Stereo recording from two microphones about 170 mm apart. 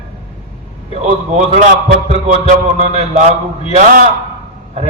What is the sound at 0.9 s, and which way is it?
A man's voice, 45° right (ahead or behind).